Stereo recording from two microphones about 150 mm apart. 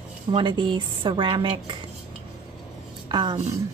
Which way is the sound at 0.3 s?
30° right (ahead or behind).